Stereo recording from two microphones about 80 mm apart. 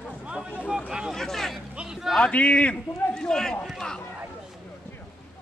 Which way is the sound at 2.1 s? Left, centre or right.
Centre.